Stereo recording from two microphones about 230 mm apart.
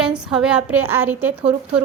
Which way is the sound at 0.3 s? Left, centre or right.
Centre.